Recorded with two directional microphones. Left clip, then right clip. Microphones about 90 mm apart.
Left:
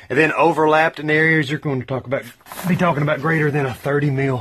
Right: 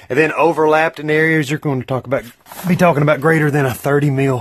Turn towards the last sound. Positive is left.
turn(degrees=-55)  # may be behind; listen again after turning